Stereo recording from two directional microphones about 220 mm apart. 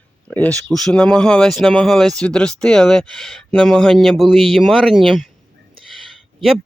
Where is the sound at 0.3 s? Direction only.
5° left (ahead or behind).